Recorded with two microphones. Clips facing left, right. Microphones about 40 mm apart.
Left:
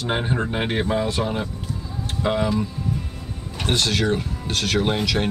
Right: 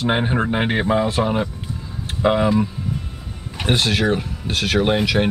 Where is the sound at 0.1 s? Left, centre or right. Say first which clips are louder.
Right 2 dB; right.